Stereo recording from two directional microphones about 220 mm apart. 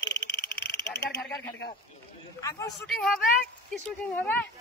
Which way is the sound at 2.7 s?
5° left (ahead or behind).